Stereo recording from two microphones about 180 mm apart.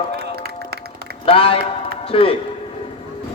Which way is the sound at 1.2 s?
30° left (ahead or behind).